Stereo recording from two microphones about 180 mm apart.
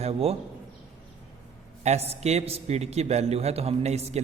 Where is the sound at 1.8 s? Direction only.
35° right (ahead or behind).